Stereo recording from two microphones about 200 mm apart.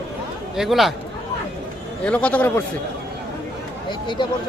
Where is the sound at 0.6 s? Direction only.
Centre (ahead or behind).